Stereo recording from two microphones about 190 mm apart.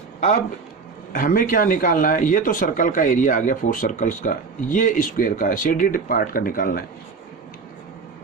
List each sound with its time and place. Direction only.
1.1 s speech: 45° left (ahead or behind)